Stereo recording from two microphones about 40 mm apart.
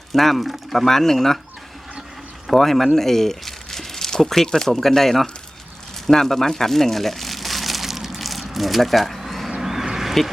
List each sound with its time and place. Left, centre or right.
0.1 s speech: centre
0.9 s speech: centre
2.5 s speech: centre
6.1 s crumpling: centre
9.6 s a sound: centre